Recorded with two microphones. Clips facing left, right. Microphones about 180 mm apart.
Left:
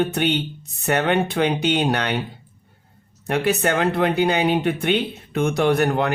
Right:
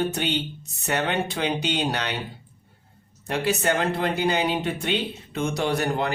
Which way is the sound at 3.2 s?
60° left (ahead or behind).